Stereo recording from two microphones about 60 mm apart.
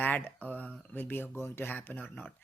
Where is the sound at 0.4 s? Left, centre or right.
Left.